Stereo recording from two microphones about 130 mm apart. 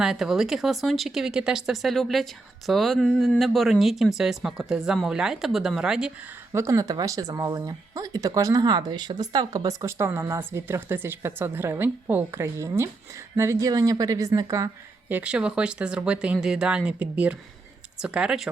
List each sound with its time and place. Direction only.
0.0 s speech: 5° right (ahead or behind)
6.5 s speech: 25° right (ahead or behind)
15.1 s speech: 10° right (ahead or behind)